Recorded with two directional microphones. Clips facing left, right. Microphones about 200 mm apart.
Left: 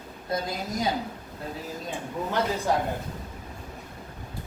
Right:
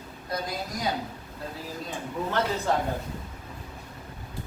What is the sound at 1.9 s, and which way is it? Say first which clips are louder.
Speech: even; 15° left (ahead or behind).